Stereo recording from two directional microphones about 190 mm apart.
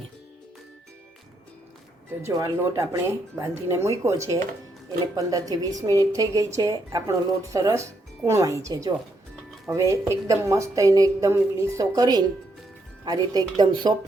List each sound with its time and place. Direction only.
2.2 s a woman's voice: 15° right (ahead or behind)